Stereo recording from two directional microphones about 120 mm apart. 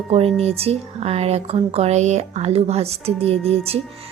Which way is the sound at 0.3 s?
55° right (ahead or behind).